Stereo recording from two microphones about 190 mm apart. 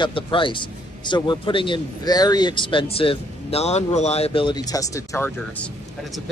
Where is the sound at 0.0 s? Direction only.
25° left (ahead or behind).